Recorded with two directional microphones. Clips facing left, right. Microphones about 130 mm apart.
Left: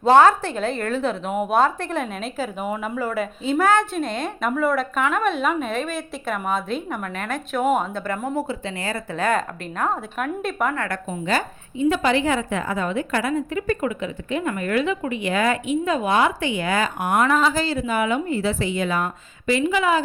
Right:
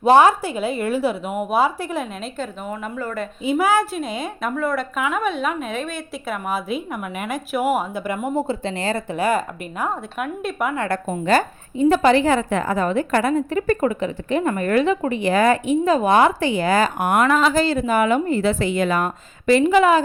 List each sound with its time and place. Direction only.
0.0 s a woman's voice: 15° right (ahead or behind)
2.6 s speech: 10° left (ahead or behind)
3.4 s a woman's voice: 10° right (ahead or behind)
8.4 s speech: 25° right (ahead or behind)
9.1 s a woman's voice: 5° right (ahead or behind)
10.8 s a woman's voice: 30° right (ahead or behind)
11.3 s a woman's voice: 45° right (ahead or behind)
17.1 s a woman's voice: 70° right (ahead or behind)
17.7 s speech: 45° right (ahead or behind)